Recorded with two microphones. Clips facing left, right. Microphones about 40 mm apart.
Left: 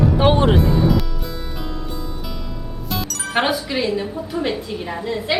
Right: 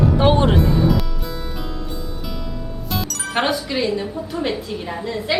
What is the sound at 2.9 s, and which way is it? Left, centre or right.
Music, centre.